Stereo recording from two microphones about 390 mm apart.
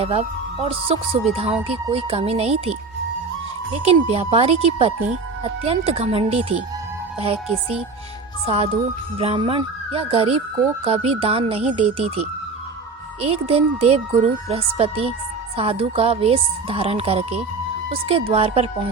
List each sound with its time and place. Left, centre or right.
0.0 s speech: centre
8.4 s speech: centre
13.2 s speech: centre